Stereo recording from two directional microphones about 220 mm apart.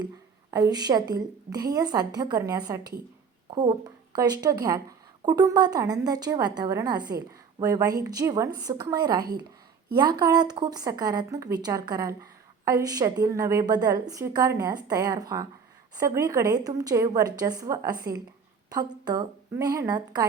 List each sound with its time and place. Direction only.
0.5 s speech: 15° right (ahead or behind)